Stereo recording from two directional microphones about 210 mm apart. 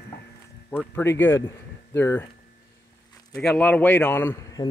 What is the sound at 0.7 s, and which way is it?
Speech, 10° left (ahead or behind).